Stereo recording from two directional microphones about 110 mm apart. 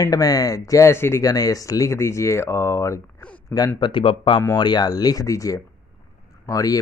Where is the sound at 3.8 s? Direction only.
50° left (ahead or behind).